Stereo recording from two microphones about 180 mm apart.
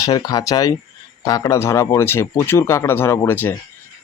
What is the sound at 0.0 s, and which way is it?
Speech, 20° left (ahead or behind).